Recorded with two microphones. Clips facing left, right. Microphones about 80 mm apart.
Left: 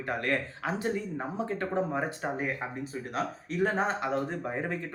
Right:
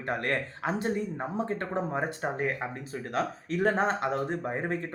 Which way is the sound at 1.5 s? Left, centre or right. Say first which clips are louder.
Left 1 dB; right.